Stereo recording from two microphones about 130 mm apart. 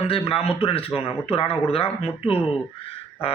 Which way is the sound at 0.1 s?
45° left (ahead or behind).